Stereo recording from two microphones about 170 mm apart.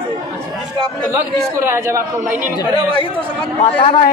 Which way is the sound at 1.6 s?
15° right (ahead or behind).